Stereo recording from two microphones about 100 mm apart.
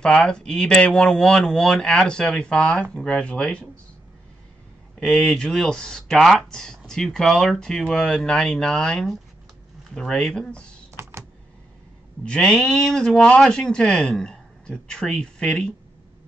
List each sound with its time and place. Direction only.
0.0 s speech: 10° left (ahead or behind)
5.0 s speech: centre (ahead or behind)
10.9 s typing: 25° right (ahead or behind)
12.3 s speech: 5° left (ahead or behind)